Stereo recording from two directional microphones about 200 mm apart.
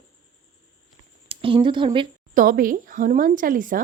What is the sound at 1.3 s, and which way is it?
Speech, 25° right (ahead or behind).